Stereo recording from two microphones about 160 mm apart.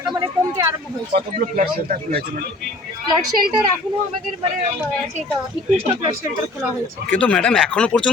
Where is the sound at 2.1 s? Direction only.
75° right (ahead or behind).